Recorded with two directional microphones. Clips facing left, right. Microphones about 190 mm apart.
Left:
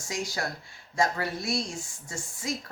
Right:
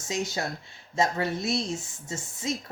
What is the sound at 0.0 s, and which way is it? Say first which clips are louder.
Speech: right 2 dB; 20° right (ahead or behind).